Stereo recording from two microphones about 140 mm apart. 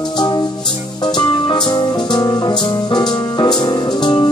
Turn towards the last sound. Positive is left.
turn(degrees=30)  # may be behind; listen again after turning